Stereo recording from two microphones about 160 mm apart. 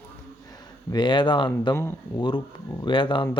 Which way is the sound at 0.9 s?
30° left (ahead or behind).